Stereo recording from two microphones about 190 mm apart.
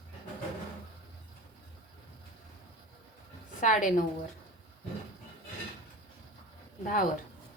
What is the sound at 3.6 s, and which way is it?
Speech, 40° left (ahead or behind).